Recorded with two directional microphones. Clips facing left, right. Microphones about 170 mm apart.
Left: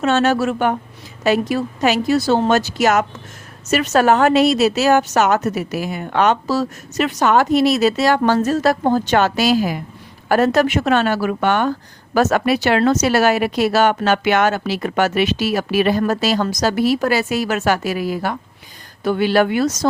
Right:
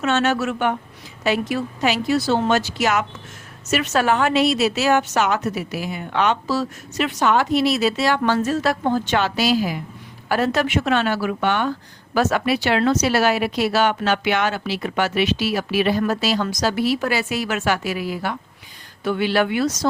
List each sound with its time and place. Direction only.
0.0 s a woman's voice: 35° left (ahead or behind)